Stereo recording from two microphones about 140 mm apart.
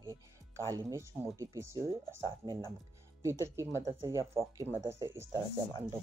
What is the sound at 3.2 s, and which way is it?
Speech, 20° right (ahead or behind).